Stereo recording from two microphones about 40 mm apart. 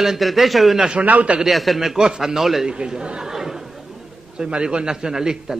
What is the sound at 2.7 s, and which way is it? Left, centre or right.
Speech, right.